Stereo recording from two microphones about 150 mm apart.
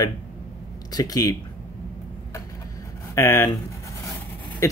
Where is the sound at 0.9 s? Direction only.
25° left (ahead or behind).